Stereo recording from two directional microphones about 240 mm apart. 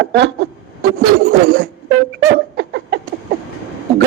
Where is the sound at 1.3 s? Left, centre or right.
Right.